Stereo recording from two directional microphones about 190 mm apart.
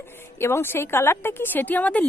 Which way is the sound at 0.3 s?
15° left (ahead or behind).